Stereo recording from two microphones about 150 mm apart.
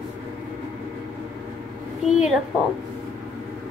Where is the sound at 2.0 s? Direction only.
Centre (ahead or behind).